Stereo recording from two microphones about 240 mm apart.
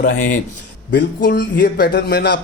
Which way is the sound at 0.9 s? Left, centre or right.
Left.